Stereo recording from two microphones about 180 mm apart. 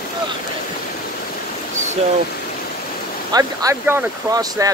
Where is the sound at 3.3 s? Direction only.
20° right (ahead or behind).